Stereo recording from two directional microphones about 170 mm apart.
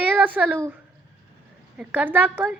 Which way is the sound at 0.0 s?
10° right (ahead or behind).